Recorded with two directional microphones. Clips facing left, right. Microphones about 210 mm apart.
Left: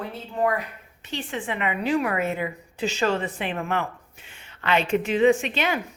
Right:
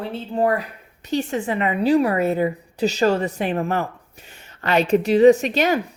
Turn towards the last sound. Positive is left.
turn(degrees=-40)  # may be behind; listen again after turning